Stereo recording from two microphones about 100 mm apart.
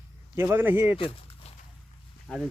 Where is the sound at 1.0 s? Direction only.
65° left (ahead or behind).